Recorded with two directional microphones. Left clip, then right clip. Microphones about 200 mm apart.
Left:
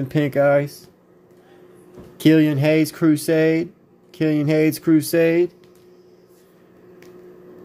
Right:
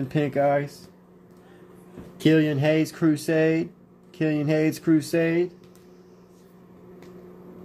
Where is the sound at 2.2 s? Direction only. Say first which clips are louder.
Left 5 dB; 50° left (ahead or behind).